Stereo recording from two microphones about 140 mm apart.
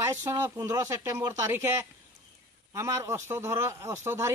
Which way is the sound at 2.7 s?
20° right (ahead or behind).